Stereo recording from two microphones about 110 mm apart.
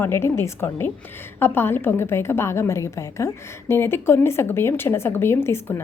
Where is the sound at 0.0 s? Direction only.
20° left (ahead or behind).